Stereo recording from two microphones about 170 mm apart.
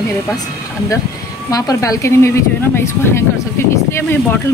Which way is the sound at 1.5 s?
20° left (ahead or behind).